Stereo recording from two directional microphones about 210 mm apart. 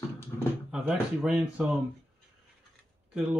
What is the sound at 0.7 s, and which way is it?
Speech, 5° right (ahead or behind).